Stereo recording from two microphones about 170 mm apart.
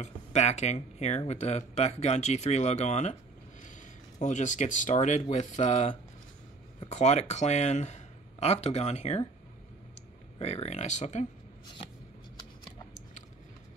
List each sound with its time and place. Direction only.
0.0 s speech: 40° left (ahead or behind)
10.4 s speech: 40° left (ahead or behind)